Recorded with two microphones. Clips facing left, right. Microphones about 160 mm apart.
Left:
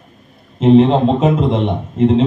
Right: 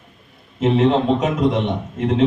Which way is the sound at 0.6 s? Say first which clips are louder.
Left 6 dB; 25° left (ahead or behind).